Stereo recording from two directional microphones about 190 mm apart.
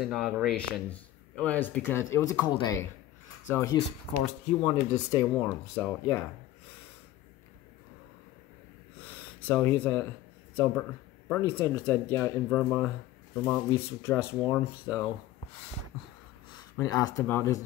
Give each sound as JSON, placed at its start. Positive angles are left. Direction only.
{"t": 0.0, "sound": "speech", "side_deg": 0}
{"t": 9.4, "sound": "speech", "side_deg": 10}
{"t": 16.7, "sound": "speech", "side_deg": 20}